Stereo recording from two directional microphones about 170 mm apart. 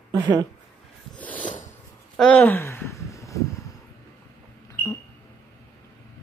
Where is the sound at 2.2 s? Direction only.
5° left (ahead or behind).